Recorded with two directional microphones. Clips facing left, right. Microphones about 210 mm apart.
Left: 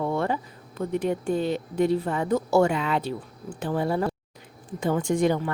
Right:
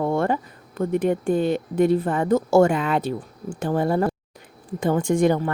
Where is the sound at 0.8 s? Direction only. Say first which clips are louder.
Right 5 dB; 55° right (ahead or behind).